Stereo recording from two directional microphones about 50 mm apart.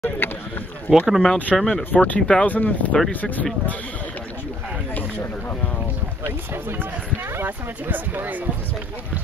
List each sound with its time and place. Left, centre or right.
0.2 s speech: left
0.8 s speech: centre
1.2 s speech: centre
1.6 s speech: centre
2.0 s speech: left
6.2 s speech: right
7.4 s speech: right